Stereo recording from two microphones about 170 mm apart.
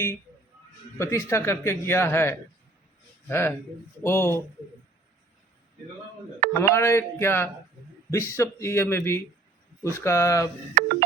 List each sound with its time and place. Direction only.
0.9 s speech: 20° left (ahead or behind)
6.6 s speech: 15° left (ahead or behind)
10.8 s tick-tock: 55° right (ahead or behind)